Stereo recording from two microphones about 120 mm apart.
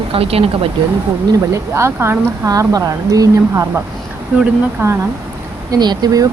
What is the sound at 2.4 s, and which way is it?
Speech, 30° right (ahead or behind).